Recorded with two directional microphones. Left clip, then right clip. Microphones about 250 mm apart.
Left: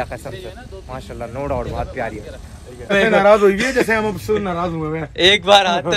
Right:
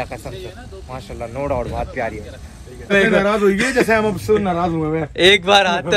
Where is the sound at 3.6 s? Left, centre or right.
Centre.